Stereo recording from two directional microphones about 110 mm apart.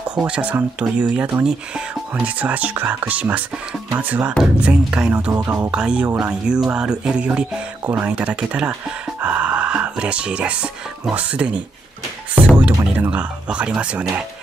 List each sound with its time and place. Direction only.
0.1 s speech: 10° right (ahead or behind)
5.3 s speech: 25° right (ahead or behind)
5.7 s speech: 10° right (ahead or behind)
6.1 s music: 10° right (ahead or behind)
12.9 s speech: 15° right (ahead or behind)